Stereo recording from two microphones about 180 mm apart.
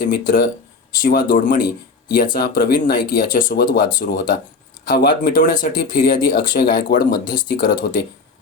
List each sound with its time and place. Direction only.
0.0 s speech: 50° left (ahead or behind)